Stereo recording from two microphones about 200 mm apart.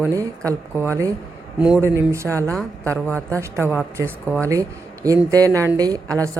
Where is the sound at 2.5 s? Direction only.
5° left (ahead or behind).